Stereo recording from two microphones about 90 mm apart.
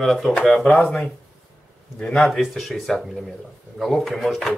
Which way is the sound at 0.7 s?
15° left (ahead or behind).